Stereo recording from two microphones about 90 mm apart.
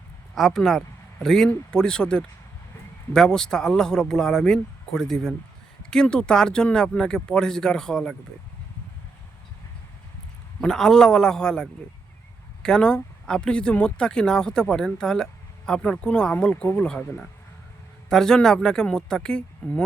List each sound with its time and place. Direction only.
0.3 s speech: centre (ahead or behind)
10.6 s speech: 5° left (ahead or behind)